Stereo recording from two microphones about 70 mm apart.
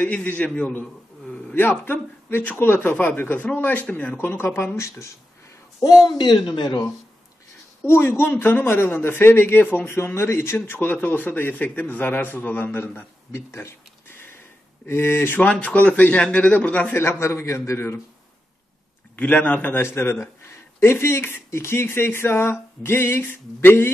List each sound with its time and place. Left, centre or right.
0.0 s a man's voice: left
1.5 s a man's voice: left
4.4 s speech: left
6.0 s speech: left
7.8 s speech: left
9.8 s speech: left
15.4 s a man's voice: left
16.9 s speech: left
19.1 s a man's voice: left
19.8 s speech: left